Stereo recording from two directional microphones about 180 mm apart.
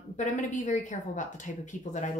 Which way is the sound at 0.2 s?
40° left (ahead or behind).